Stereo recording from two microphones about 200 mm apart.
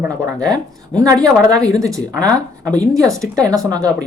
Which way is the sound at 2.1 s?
5° left (ahead or behind).